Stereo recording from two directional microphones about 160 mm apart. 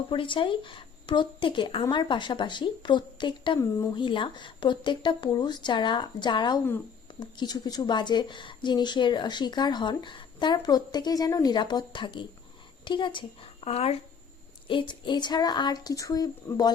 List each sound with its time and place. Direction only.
0.1 s a woman's voice: 30° left (ahead or behind)